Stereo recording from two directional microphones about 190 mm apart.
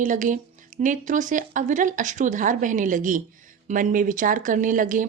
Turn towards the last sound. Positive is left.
turn(degrees=-45)  # may be behind; listen again after turning